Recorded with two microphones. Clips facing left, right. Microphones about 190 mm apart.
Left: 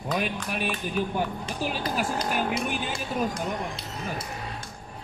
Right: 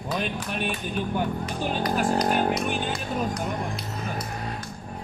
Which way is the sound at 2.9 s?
25° left (ahead or behind).